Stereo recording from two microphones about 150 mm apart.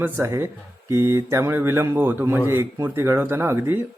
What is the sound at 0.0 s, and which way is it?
Speech, 15° right (ahead or behind).